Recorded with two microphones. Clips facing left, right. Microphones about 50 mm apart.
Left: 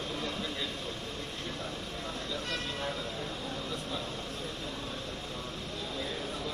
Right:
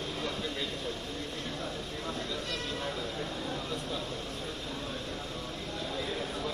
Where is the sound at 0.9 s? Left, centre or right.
Left.